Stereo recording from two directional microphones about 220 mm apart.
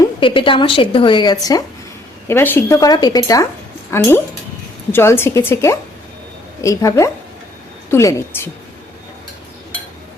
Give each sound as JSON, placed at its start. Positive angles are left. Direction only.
{"t": 0.2, "sound": "a woman's voice", "side_deg": 25}